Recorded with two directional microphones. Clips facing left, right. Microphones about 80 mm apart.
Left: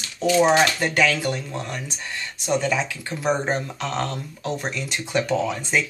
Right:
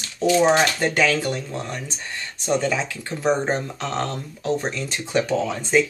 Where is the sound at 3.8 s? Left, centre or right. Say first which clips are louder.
Even; right.